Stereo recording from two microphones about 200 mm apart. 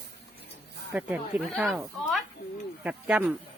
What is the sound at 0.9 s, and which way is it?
Speech, 10° right (ahead or behind).